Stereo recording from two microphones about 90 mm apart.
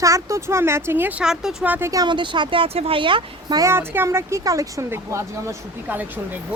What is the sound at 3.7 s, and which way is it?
Speech, 25° right (ahead or behind).